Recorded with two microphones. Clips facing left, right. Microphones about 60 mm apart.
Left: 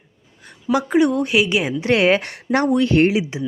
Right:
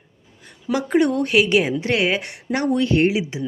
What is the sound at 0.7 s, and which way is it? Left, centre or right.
A woman's voice, centre.